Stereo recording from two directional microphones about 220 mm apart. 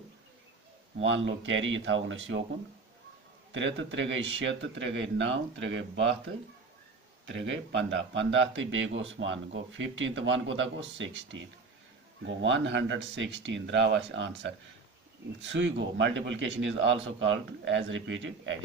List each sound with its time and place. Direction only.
1.0 s speech: 60° right (ahead or behind)
3.5 s speech: 55° right (ahead or behind)
7.2 s speech: 55° right (ahead or behind)